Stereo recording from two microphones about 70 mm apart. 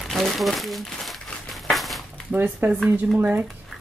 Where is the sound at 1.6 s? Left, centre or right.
Centre.